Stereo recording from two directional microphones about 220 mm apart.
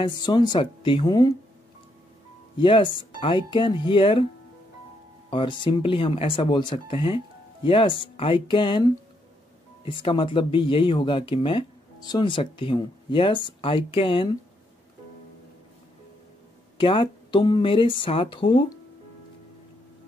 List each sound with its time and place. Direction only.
0.0 s speech: 20° left (ahead or behind)
2.6 s speech: 20° left (ahead or behind)
5.3 s speech: 20° left (ahead or behind)
16.7 s speech: 25° left (ahead or behind)